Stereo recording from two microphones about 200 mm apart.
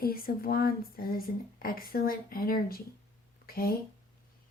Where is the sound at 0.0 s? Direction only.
50° left (ahead or behind).